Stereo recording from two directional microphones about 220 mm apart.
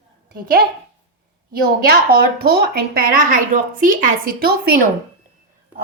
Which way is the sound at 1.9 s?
45° right (ahead or behind).